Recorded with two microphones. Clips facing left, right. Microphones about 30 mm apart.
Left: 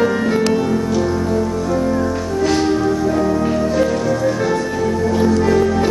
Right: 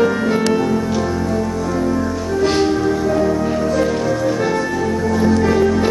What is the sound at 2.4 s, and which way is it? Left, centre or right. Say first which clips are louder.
Music: right 1 dB; centre.